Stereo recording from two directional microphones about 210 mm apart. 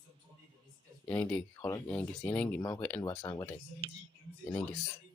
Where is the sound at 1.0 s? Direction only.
5° left (ahead or behind).